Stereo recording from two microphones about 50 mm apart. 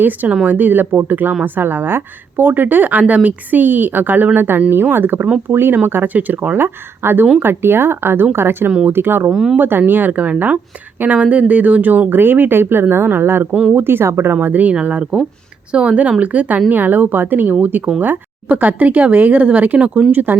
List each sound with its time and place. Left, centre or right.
0.4 s a woman's voice: right
7.0 s speech: right
9.3 s speech: centre
9.6 s a woman's voice: right
14.4 s a woman's voice: right
20.1 s speech: right